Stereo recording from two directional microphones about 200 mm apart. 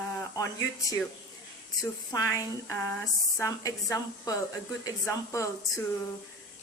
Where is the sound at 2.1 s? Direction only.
15° left (ahead or behind).